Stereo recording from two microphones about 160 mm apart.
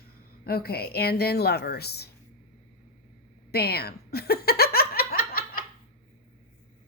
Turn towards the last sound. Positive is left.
turn(degrees=70)  # may be behind; listen again after turning